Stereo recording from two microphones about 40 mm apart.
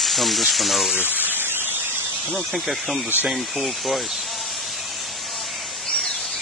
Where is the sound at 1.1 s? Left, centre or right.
Right.